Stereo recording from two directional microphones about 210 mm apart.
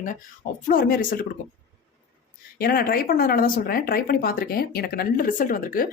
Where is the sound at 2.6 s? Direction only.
45° left (ahead or behind).